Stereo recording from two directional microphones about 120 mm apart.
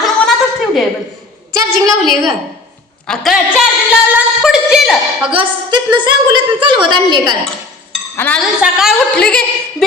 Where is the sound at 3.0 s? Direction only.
Centre (ahead or behind).